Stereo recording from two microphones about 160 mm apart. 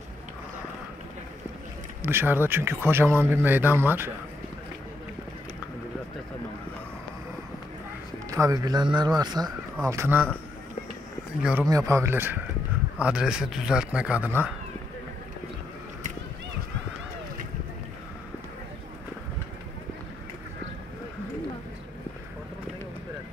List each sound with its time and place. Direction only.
2.0 s speech: 15° right (ahead or behind)
8.3 s speech: 20° right (ahead or behind)
9.8 s speech: 15° right (ahead or behind)
11.7 s a man's voice: 20° right (ahead or behind)